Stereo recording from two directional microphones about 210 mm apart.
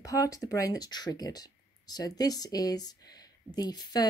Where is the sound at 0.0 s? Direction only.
15° left (ahead or behind).